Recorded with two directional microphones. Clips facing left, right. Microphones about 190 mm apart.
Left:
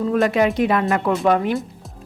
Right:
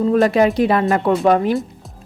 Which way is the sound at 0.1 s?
35° right (ahead or behind).